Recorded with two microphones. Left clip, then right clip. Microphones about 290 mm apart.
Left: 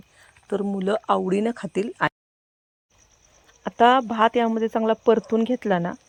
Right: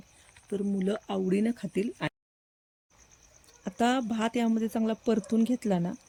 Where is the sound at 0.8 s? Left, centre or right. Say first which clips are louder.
Left 13 dB; centre.